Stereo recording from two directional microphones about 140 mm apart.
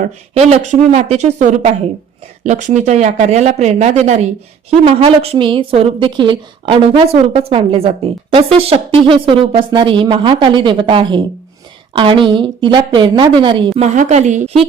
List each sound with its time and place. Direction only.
0.0 s a woman's voice: 55° right (ahead or behind); by 13.7 s 35° right (ahead or behind)
13.7 s speech: 55° right (ahead or behind)